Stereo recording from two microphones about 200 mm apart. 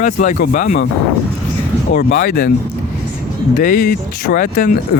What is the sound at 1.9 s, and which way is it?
Speech, 50° left (ahead or behind).